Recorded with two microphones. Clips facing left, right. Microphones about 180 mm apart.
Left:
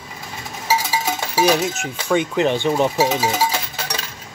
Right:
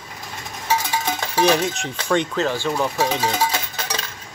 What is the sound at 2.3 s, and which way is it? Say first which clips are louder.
Speech: left 4 dB; 20° left (ahead or behind).